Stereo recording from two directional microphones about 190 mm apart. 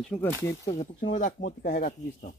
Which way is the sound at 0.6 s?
35° left (ahead or behind).